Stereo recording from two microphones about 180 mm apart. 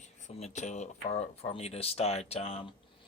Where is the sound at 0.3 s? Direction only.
40° left (ahead or behind).